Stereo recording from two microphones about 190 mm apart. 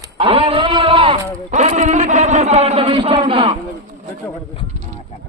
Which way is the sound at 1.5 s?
40° right (ahead or behind).